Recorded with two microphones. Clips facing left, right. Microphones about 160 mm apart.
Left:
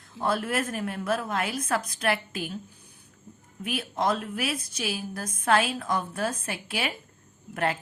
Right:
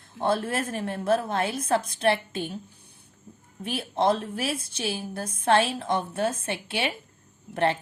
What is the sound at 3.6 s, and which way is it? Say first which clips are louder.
Speech: right 3 dB; 30° right (ahead or behind).